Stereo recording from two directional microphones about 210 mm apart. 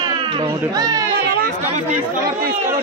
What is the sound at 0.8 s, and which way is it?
Speech, 15° right (ahead or behind).